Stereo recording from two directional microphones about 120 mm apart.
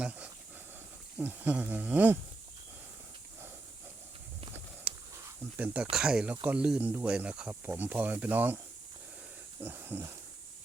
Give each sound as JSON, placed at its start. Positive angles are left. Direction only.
{"t": 0.0, "sound": "hiss", "side_deg": -10}
{"t": 1.2, "sound": "speech", "side_deg": -15}
{"t": 4.9, "sound": "a sound", "side_deg": -10}
{"t": 5.5, "sound": "speech", "side_deg": -15}
{"t": 9.6, "sound": "pig", "side_deg": -15}